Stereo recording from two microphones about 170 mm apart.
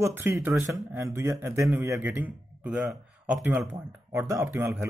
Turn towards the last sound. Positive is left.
turn(degrees=-10)  # may be behind; listen again after turning